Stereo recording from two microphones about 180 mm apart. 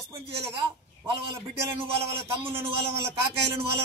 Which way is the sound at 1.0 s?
30° right (ahead or behind).